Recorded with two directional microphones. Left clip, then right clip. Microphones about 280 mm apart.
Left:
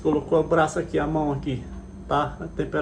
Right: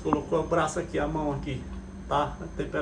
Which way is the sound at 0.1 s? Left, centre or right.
Centre.